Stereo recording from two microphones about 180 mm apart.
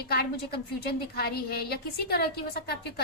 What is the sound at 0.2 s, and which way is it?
A woman's voice, 60° left (ahead or behind).